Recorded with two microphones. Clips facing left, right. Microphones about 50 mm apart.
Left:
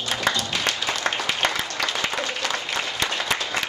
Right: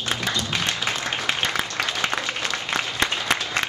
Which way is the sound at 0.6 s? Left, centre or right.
Left.